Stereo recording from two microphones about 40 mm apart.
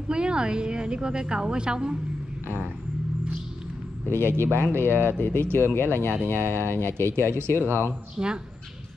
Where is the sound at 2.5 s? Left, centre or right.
Right.